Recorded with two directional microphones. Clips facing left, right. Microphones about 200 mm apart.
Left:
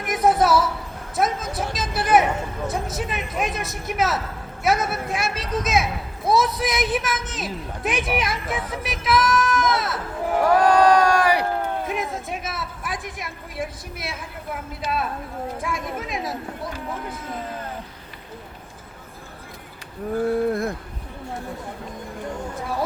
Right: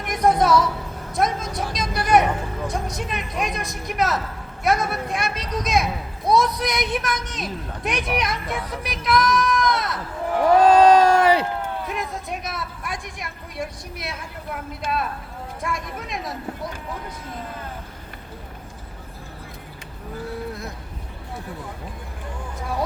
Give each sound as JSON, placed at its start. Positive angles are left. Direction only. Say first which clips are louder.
{"t": 0.0, "sound": "a sound", "louder": "even", "side_deg": 5}
{"t": 1.1, "sound": "a child's voice", "louder": "even", "side_deg": 5}
{"t": 9.0, "sound": "goat", "louder": "even", "side_deg": 0}
{"t": 10.6, "sound": "speech", "louder": "right 4 dB", "side_deg": -25}
{"t": 11.9, "sound": "a child's voice", "louder": "left 2 dB", "side_deg": 0}
{"t": 14.8, "sound": "a woman's voice", "louder": "even", "side_deg": -50}
{"t": 15.6, "sound": "a child's voice", "louder": "left 1 dB", "side_deg": 0}
{"t": 20.1, "sound": "speech", "louder": "left 10 dB", "side_deg": 50}